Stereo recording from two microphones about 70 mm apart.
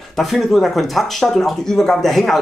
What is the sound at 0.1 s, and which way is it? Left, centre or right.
A man's voice, centre.